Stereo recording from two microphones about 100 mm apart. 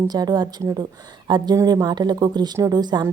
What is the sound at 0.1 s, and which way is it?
Speech, 40° right (ahead or behind).